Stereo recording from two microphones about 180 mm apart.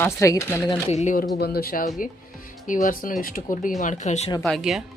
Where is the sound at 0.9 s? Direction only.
40° left (ahead or behind).